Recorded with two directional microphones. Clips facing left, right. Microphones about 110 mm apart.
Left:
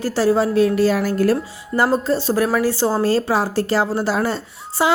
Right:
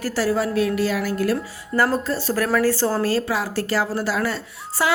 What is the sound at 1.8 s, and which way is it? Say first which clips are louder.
Speech: left 3 dB; 25° left (ahead or behind).